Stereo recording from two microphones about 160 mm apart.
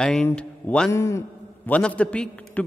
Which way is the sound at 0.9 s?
20° left (ahead or behind).